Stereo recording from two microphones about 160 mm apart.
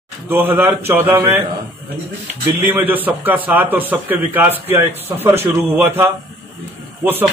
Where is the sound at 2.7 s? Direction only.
10° right (ahead or behind).